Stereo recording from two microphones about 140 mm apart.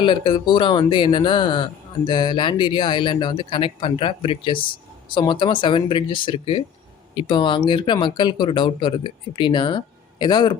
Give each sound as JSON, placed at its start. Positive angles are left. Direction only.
{"t": 0.0, "sound": "speech", "side_deg": 35}